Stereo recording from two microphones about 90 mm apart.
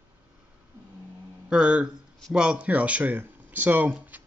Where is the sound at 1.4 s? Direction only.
10° right (ahead or behind).